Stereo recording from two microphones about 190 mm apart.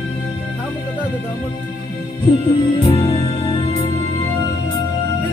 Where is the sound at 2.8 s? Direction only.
30° left (ahead or behind).